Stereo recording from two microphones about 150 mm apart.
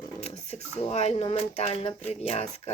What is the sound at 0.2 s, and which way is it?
Speech, 45° left (ahead or behind).